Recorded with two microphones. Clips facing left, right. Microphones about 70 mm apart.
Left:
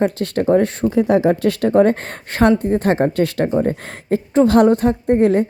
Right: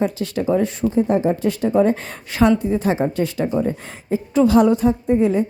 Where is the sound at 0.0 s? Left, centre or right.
Left.